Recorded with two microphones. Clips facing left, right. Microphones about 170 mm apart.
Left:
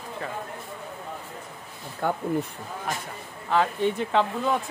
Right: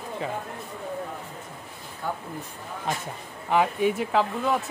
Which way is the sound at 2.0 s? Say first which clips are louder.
Left 5 dB; 65° left (ahead or behind).